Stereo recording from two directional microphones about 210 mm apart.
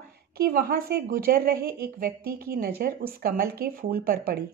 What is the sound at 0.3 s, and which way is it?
A woman's voice, 45° right (ahead or behind).